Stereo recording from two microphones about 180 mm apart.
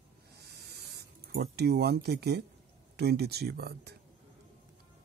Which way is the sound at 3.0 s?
65° right (ahead or behind).